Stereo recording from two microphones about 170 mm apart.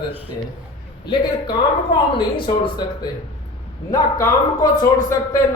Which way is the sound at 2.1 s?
30° left (ahead or behind).